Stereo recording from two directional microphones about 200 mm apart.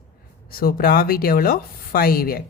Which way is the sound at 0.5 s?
50° left (ahead or behind).